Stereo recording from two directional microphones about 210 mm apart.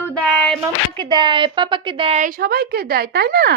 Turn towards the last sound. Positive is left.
turn(degrees=-50)  # may be behind; listen again after turning